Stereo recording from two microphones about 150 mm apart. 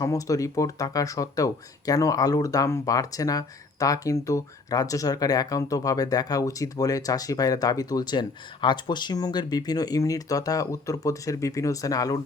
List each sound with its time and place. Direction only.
0.0 s speech: 20° left (ahead or behind)